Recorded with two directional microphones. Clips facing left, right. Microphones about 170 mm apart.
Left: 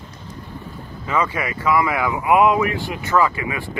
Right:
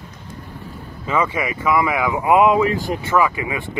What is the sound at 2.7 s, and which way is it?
Speech, 40° right (ahead or behind).